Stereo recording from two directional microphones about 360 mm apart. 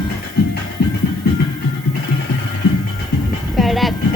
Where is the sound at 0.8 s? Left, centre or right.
Left.